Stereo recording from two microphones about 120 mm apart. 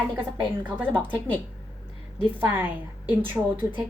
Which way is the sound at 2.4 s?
15° right (ahead or behind).